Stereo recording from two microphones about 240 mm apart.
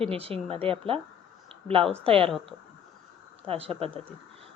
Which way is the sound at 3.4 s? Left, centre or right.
Right.